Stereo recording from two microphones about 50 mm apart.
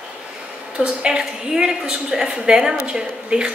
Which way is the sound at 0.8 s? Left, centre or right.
Centre.